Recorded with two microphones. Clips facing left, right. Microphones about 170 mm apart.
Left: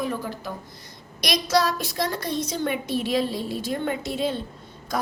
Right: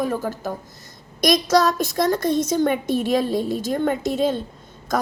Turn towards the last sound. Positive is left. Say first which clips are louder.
# right 5 dB
turn(degrees=-45)  # may be behind; listen again after turning